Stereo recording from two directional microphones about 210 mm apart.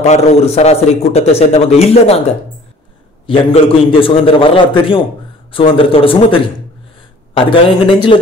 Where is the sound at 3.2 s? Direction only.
25° left (ahead or behind).